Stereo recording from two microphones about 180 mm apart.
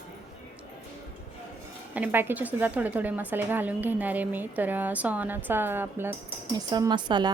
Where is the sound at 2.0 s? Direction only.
10° right (ahead or behind).